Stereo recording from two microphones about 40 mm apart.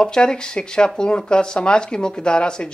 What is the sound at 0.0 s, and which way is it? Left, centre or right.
Speech, centre.